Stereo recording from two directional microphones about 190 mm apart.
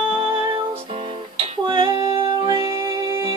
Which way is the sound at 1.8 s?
20° right (ahead or behind).